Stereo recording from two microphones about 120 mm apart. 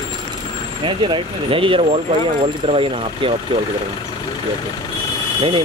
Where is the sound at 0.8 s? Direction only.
45° right (ahead or behind).